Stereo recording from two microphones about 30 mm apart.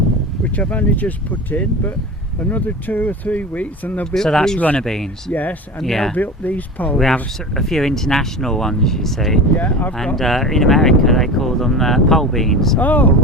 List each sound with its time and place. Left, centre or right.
0.4 s speech: left
3.3 s speech: left
4.1 s speech: centre
5.3 s speech: left
5.8 s speech: centre
6.1 s speech: left
7.0 s speech: centre
12.8 s speech: left